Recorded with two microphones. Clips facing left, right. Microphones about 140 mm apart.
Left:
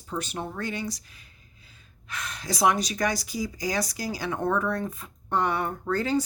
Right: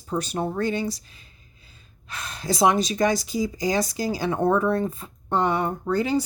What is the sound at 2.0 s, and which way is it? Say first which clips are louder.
Speech: right 5 dB; 30° right (ahead or behind).